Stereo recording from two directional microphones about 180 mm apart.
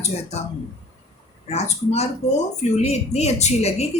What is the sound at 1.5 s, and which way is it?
Speech, 35° left (ahead or behind).